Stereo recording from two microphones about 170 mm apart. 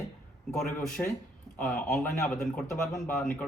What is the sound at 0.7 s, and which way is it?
Speech, 10° left (ahead or behind).